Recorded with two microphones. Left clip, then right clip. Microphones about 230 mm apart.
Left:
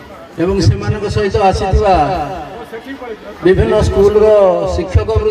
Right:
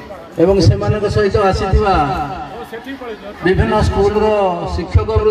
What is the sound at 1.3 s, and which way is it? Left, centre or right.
Speech, left.